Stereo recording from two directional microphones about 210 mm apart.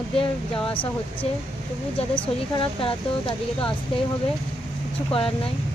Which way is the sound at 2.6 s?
25° left (ahead or behind).